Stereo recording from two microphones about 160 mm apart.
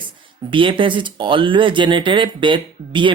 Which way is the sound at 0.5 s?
30° right (ahead or behind).